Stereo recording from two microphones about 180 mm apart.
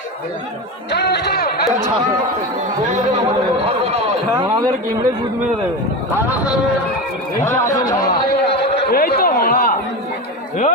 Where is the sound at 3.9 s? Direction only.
35° right (ahead or behind).